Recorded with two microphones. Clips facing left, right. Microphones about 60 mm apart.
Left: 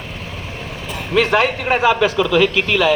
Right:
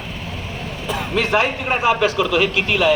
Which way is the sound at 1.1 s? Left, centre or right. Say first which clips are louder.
Left 4 dB; left.